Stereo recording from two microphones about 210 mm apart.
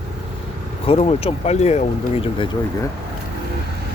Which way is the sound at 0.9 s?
30° left (ahead or behind).